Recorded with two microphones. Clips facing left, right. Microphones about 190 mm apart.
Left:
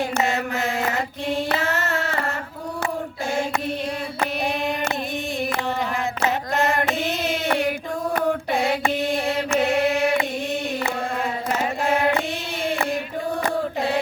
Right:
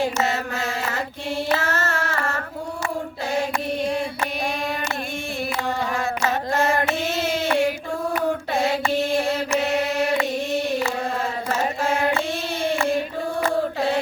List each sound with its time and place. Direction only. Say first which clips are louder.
0.2 s mantra: left 1 dB; 15° left (ahead or behind)
1.5 s child singing: even; 15° left (ahead or behind)
6.2 s a sound: even; 15° left (ahead or behind)
9.5 s mantra: left 1 dB; 55° left (ahead or behind)
11.4 s chant: left 1 dB; 15° left (ahead or behind)